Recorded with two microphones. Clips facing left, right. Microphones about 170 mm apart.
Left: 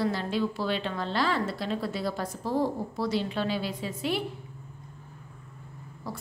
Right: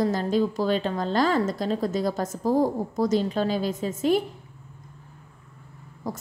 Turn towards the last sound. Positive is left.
turn(degrees=-45)  # may be behind; listen again after turning